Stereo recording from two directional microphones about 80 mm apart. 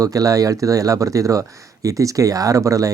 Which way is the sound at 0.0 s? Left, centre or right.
Right.